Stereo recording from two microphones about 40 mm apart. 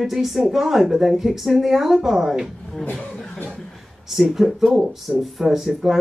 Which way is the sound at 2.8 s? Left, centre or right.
Left.